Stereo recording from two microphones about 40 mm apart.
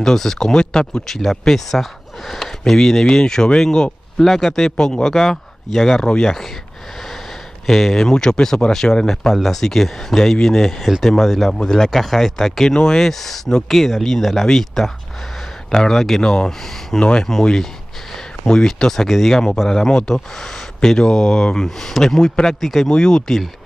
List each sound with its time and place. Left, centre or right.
0.0 s speech: centre
4.2 s speech: centre
4.7 s speech: centre
7.6 s speech: centre
9.3 s speech: centre
18.7 s speech: centre
22.0 s speech: centre
22.5 s speech: centre
22.8 s speech: centre